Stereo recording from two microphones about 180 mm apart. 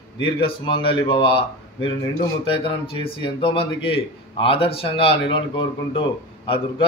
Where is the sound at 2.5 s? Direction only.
30° left (ahead or behind).